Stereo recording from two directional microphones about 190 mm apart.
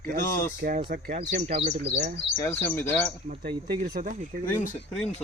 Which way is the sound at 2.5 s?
10° left (ahead or behind).